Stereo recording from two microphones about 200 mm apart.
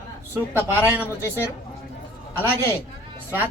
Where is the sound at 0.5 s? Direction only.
10° right (ahead or behind).